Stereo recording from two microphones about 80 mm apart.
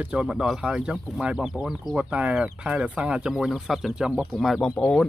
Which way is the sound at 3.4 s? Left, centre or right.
Centre.